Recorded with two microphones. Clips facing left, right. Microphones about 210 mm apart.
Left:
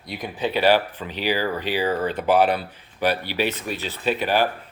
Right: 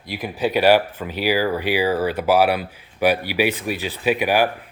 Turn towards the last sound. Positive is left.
turn(degrees=-10)  # may be behind; listen again after turning